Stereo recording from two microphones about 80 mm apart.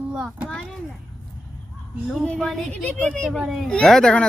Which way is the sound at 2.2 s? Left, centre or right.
Centre.